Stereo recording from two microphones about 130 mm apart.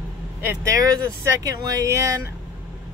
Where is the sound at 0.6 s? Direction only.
25° right (ahead or behind).